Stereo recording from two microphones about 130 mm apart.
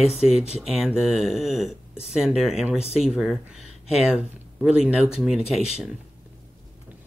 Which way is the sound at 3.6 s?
55° left (ahead or behind).